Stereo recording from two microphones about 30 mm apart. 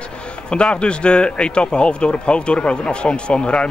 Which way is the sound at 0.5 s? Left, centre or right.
Left.